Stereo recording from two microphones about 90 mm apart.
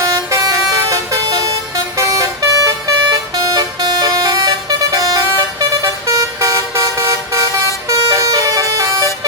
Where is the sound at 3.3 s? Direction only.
50° right (ahead or behind).